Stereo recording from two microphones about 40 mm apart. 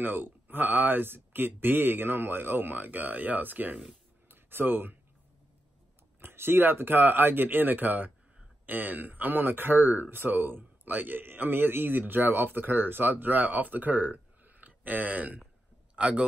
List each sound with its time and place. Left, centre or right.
0.0 s speech: right
4.3 s a sound: right
6.2 s speech: right
16.0 s a man's voice: right